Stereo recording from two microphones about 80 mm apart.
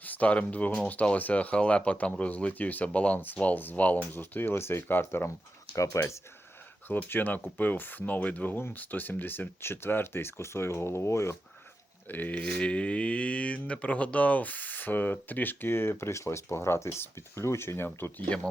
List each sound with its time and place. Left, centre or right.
0.0 s speech: centre
5.7 s speech: left
6.8 s speech: left
12.0 s speech: left